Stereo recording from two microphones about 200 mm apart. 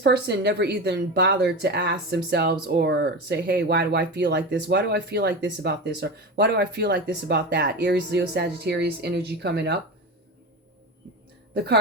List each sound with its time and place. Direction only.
0.0 s speech: 55° right (ahead or behind)
11.5 s a woman's voice: 55° right (ahead or behind)